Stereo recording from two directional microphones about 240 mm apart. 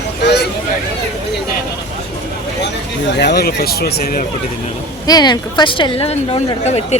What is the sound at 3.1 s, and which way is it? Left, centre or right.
Speech, left.